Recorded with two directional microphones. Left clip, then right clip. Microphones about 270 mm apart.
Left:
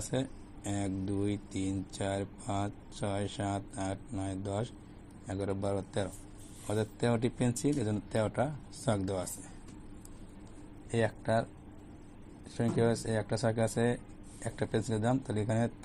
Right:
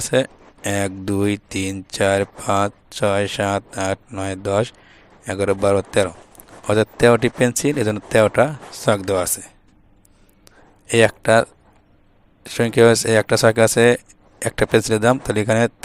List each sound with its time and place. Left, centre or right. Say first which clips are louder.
0.1 s speech: right 18 dB; right
10.9 s speech: right 17 dB; right
12.5 s speech: right 18 dB; right